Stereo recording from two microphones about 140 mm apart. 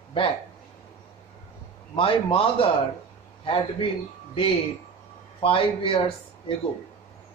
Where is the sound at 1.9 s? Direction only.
40° left (ahead or behind).